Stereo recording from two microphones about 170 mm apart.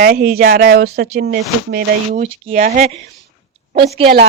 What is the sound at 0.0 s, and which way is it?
Speech, 65° right (ahead or behind).